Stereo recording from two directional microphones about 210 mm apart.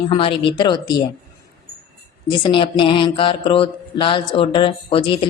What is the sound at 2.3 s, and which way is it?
Speech, 25° left (ahead or behind).